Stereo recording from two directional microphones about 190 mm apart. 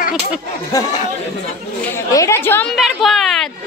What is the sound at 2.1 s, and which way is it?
Speech, 15° left (ahead or behind).